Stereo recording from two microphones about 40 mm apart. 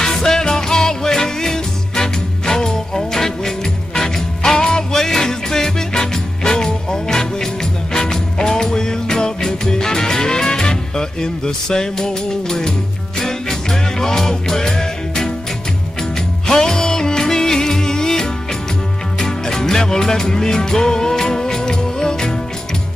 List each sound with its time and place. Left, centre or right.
0.0 s music: centre